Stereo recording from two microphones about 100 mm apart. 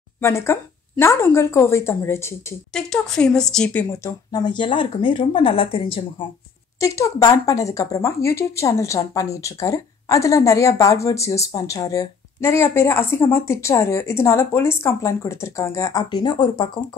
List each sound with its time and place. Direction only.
0.2 s speech: 25° left (ahead or behind)
2.7 s speech: 5° left (ahead or behind)
4.0 s speech: 40° left (ahead or behind); by 6.2 s 65° left (ahead or behind)
6.8 s speech: 35° left (ahead or behind)
15.9 s speech: 45° left (ahead or behind)